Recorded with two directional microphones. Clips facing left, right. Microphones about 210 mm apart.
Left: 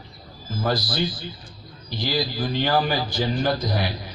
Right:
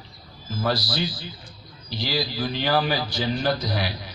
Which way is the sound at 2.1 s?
50° left (ahead or behind).